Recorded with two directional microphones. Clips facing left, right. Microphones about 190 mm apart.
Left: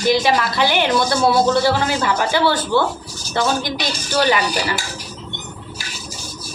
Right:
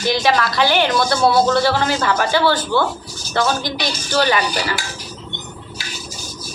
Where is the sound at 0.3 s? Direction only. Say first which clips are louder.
Right 1 dB; 20° left (ahead or behind).